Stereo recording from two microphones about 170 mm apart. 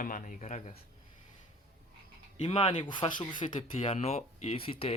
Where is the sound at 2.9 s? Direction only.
25° left (ahead or behind).